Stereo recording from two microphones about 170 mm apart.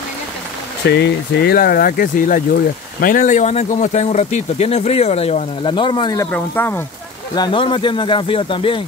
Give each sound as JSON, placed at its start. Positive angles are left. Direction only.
{"t": 0.8, "sound": "speech", "side_deg": 80}
{"t": 6.3, "sound": "speech", "side_deg": 10}
{"t": 7.3, "sound": "speech", "side_deg": 25}